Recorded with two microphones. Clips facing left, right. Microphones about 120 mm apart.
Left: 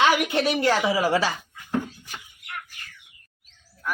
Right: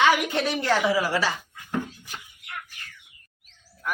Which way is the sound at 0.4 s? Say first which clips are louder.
Even; 15° left (ahead or behind).